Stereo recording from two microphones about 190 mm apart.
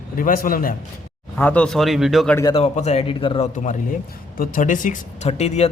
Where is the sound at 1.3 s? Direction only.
5° left (ahead or behind).